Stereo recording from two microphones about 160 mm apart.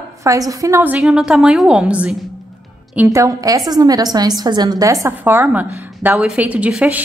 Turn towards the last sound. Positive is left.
turn(degrees=-10)  # may be behind; listen again after turning